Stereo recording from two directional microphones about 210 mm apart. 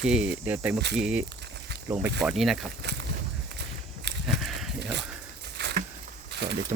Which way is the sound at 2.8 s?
55° right (ahead or behind).